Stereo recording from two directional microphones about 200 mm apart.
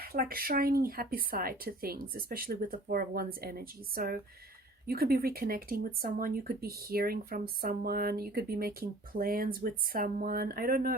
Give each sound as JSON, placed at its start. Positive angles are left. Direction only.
{"t": 0.0, "sound": "speech", "side_deg": -45}